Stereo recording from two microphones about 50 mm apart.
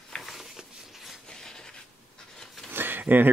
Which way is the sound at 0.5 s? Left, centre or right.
Centre.